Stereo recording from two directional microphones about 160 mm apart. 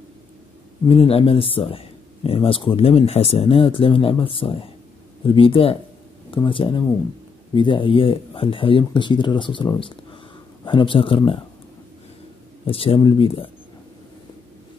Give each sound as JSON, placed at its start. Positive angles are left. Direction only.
{"t": 0.8, "sound": "speech", "side_deg": 35}
{"t": 12.6, "sound": "speech", "side_deg": 35}